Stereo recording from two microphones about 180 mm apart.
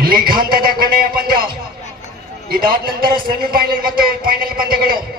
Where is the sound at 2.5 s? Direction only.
55° right (ahead or behind).